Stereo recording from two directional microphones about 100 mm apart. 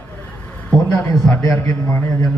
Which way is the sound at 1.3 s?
35° left (ahead or behind).